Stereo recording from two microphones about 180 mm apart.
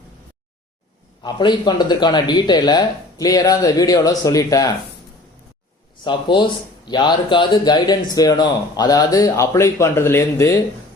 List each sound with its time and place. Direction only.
1.2 s speech: 25° left (ahead or behind)
6.1 s speech: 25° left (ahead or behind)